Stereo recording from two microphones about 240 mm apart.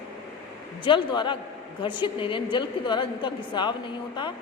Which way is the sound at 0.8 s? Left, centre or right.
Centre.